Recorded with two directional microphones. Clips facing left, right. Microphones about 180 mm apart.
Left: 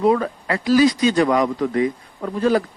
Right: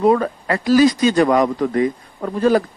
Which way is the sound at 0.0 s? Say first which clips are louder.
Right 2 dB; 45° right (ahead or behind).